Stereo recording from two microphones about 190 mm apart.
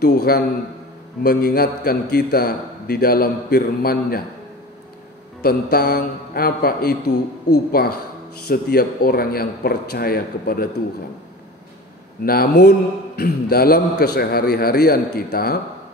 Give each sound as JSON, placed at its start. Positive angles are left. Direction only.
{"t": 0.0, "sound": "a man's voice", "side_deg": 55}
{"t": 5.4, "sound": "a man's voice", "side_deg": 55}
{"t": 12.3, "sound": "a man's voice", "side_deg": 55}